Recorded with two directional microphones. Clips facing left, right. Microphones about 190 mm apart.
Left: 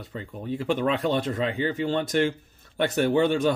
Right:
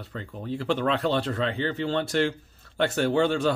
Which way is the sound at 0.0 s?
15° left (ahead or behind).